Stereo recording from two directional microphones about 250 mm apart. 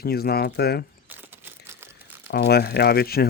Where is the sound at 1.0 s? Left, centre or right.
Centre.